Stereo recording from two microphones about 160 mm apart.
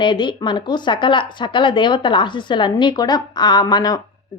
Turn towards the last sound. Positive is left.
turn(degrees=25)  # may be behind; listen again after turning